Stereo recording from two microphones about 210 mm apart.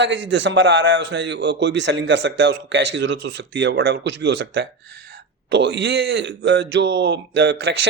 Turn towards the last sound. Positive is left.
turn(degrees=-50)  # may be behind; listen again after turning